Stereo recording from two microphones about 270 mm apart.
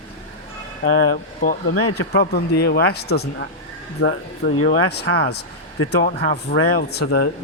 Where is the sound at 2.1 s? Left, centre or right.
Left.